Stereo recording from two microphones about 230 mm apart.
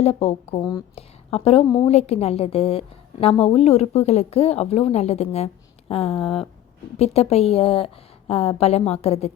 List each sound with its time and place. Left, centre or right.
0.0 s speech: left